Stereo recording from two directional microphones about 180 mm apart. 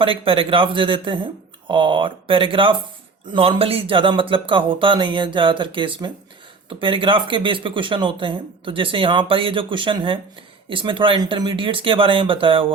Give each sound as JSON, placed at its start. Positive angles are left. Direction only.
{"t": 0.0, "sound": "speech", "side_deg": -30}